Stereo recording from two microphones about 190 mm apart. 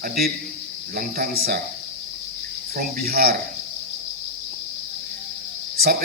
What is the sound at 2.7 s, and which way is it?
Speech, 55° right (ahead or behind).